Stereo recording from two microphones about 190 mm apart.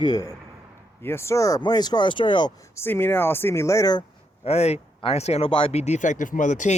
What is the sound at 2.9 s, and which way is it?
Speech, 10° left (ahead or behind).